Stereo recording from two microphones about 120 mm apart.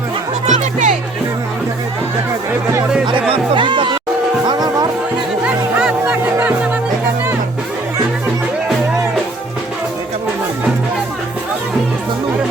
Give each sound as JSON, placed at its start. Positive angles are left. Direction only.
{"t": 0.4, "sound": "music", "side_deg": -85}
{"t": 3.3, "sound": "music", "side_deg": -45}
{"t": 5.5, "sound": "music", "side_deg": -10}